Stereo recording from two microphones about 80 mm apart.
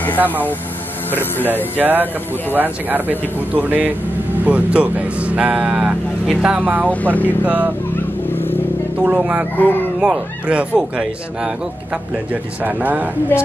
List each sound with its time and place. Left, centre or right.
1.4 s speech: right
6.9 s speech: centre
7.4 s speech: centre
8.3 s vehicle: left
9.0 s speech: centre
9.6 s speech: left
9.9 s speech: centre
12.3 s speech: centre